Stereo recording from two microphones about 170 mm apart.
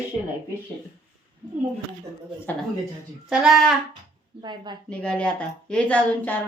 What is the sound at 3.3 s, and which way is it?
Speech, centre (ahead or behind).